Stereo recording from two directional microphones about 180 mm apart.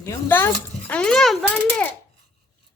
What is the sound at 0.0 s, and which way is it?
A child's voice, 15° left (ahead or behind).